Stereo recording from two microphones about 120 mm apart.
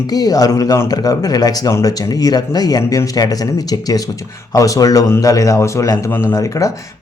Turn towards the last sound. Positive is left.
turn(degrees=25)  # may be behind; listen again after turning